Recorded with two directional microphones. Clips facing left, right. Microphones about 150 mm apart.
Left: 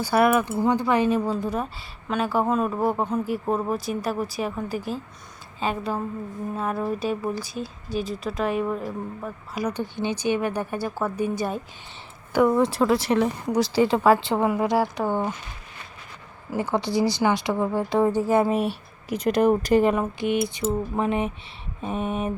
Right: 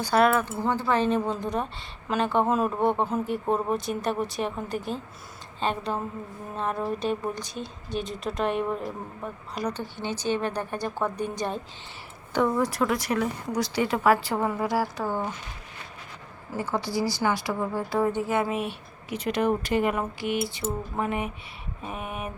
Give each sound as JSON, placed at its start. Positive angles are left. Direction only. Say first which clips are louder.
{"t": 0.0, "sound": "a woman's voice", "louder": "left 2 dB", "side_deg": 10}
{"t": 12.5, "sound": "a woman's voice", "louder": "left 5 dB", "side_deg": 25}
{"t": 16.5, "sound": "a woman's voice", "louder": "left 4 dB", "side_deg": 20}
{"t": 18.1, "sound": "speech", "louder": "left 5 dB", "side_deg": 35}
{"t": 20.0, "sound": "a woman's voice", "louder": "left 4 dB", "side_deg": 20}